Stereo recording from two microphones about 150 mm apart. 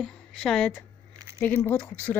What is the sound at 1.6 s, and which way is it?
Speech, 15° left (ahead or behind).